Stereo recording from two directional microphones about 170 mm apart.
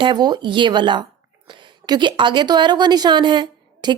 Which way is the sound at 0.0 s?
25° right (ahead or behind).